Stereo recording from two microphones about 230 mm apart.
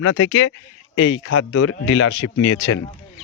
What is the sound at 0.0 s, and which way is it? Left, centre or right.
Speech, left.